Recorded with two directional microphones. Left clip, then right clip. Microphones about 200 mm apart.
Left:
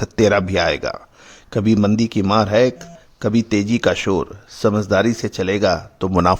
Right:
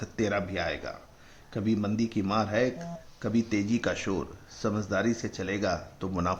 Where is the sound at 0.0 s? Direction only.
60° left (ahead or behind).